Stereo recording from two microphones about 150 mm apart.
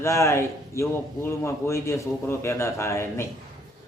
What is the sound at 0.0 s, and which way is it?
A man's voice, 20° left (ahead or behind).